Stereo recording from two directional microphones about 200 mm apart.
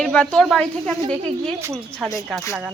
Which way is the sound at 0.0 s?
5° left (ahead or behind).